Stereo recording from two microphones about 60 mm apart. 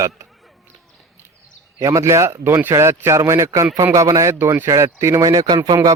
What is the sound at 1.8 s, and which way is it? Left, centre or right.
Speech, right.